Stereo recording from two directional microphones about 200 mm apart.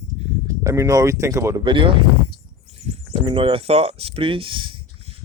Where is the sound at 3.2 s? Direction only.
25° right (ahead or behind).